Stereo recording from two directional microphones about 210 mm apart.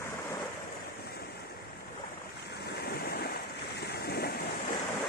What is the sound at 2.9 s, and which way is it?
Waves, 50° left (ahead or behind).